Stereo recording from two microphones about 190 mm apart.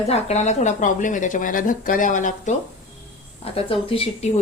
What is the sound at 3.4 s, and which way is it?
Speech, 30° left (ahead or behind).